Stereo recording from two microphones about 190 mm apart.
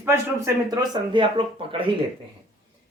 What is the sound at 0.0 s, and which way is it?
Speech, 15° right (ahead or behind).